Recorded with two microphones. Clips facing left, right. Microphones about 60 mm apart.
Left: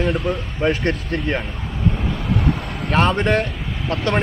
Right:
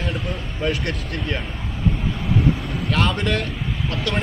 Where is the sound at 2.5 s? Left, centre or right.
Left.